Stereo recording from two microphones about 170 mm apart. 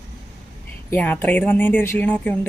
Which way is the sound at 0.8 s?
10° left (ahead or behind).